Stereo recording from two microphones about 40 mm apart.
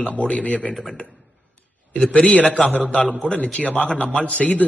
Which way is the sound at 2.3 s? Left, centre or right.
Left.